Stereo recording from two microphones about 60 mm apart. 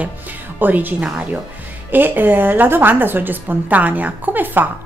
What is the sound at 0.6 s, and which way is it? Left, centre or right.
A woman's voice, right.